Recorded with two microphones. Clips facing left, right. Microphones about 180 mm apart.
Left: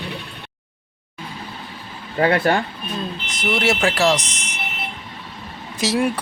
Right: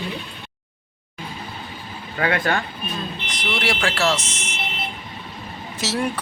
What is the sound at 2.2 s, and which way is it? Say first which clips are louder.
Speech: left 5 dB; 30° left (ahead or behind).